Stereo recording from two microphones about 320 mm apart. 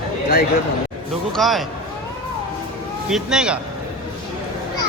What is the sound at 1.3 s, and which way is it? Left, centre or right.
Speech, centre.